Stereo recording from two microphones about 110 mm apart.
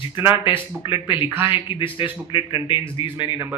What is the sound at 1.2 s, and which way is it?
Speech, 20° right (ahead or behind).